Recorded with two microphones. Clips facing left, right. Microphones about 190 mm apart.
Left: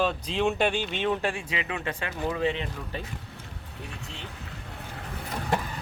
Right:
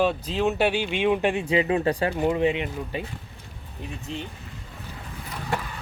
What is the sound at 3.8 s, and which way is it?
Boat, 70° left (ahead or behind).